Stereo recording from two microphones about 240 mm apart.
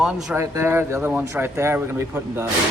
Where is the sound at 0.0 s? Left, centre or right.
Centre.